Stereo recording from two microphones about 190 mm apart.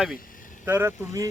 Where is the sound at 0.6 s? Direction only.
15° right (ahead or behind).